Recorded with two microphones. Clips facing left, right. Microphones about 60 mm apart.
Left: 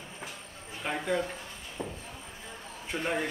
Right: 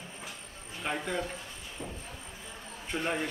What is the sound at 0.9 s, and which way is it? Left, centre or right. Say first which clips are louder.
Speech: left 5 dB; centre.